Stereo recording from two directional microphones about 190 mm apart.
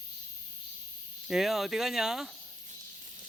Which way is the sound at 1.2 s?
Centre (ahead or behind).